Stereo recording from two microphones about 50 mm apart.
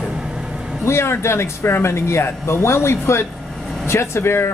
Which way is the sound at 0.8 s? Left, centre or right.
Left.